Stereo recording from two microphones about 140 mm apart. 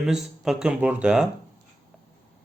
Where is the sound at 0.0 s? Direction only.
5° right (ahead or behind).